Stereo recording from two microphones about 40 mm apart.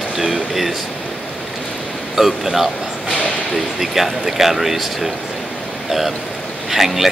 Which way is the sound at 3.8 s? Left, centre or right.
Centre.